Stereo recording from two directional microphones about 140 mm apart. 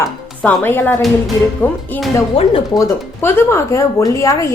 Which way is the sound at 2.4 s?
40° left (ahead or behind).